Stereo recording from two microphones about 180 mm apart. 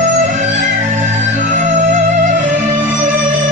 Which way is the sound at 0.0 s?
45° right (ahead or behind).